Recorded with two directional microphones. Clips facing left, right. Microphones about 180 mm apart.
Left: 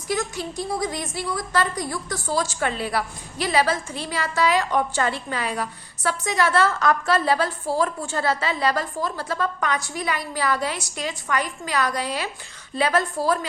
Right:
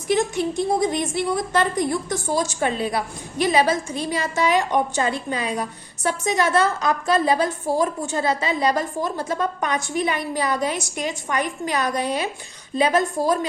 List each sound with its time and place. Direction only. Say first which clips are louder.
0.1 s a woman's voice: right 6 dB; 25° right (ahead or behind)